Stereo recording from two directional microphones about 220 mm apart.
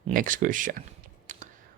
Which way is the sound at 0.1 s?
40° right (ahead or behind).